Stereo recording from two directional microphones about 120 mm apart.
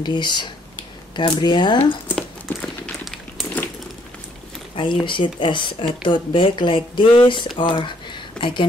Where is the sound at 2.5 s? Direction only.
15° left (ahead or behind).